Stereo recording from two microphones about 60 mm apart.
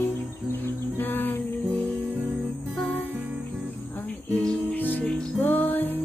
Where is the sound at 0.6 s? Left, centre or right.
Left.